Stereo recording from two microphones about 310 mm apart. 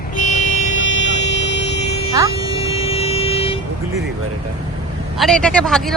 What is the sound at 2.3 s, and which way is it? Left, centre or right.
Vehicle, centre.